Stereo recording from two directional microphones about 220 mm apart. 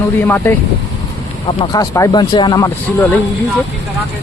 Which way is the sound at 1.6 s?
20° left (ahead or behind).